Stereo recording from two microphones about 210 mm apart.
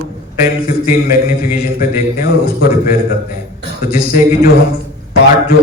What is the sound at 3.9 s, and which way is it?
Speech, 45° left (ahead or behind).